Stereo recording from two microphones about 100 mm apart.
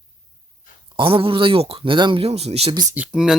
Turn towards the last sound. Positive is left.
turn(degrees=-10)  # may be behind; listen again after turning